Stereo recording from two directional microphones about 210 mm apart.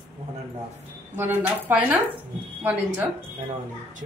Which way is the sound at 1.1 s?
10° right (ahead or behind).